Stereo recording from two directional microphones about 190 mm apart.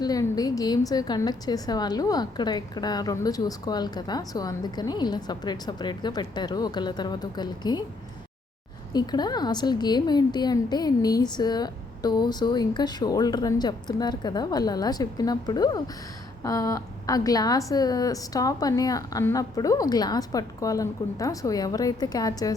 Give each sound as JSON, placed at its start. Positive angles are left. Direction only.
{"t": 0.0, "sound": "a woman's voice", "side_deg": 20}
{"t": 8.9, "sound": "a woman's voice", "side_deg": 20}